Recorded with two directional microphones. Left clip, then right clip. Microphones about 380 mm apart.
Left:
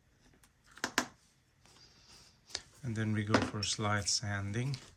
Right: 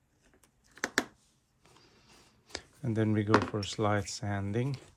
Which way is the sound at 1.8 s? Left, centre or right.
Centre.